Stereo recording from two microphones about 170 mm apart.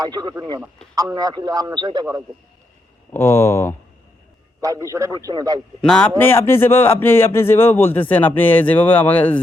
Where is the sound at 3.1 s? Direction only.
15° left (ahead or behind).